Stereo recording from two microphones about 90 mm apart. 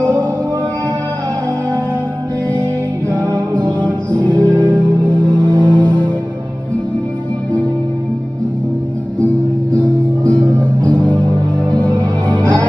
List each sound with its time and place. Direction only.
3.1 s music: 15° left (ahead or behind)
5.6 s music: 15° left (ahead or behind)
9.2 s music: 15° left (ahead or behind)